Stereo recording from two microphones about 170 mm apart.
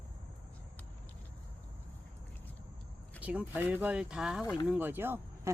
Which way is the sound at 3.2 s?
10° right (ahead or behind).